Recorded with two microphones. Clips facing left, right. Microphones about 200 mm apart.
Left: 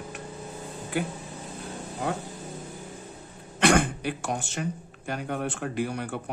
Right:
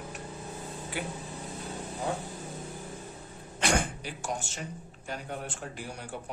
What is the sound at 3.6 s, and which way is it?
Speech, 60° left (ahead or behind).